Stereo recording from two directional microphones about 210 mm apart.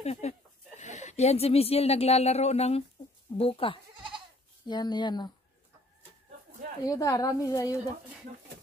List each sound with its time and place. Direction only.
0.0 s speech: 30° left (ahead or behind)
6.8 s a woman's voice: 15° left (ahead or behind)